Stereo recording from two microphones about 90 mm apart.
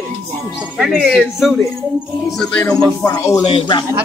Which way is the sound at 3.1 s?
35° left (ahead or behind).